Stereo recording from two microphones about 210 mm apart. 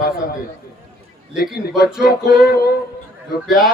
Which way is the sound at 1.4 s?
45° left (ahead or behind).